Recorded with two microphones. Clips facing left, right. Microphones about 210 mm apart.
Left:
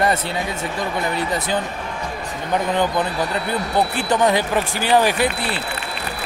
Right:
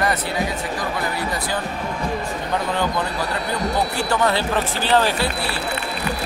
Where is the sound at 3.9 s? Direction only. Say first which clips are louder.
Left 2 dB; 20° left (ahead or behind).